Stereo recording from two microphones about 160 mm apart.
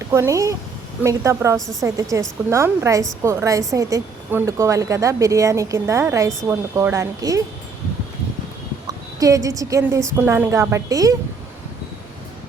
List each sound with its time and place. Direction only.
0.1 s a woman's voice: 15° right (ahead or behind)
8.9 s a woman's voice: 20° right (ahead or behind)